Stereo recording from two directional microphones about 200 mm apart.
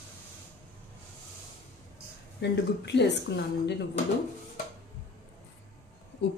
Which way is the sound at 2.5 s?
60° left (ahead or behind).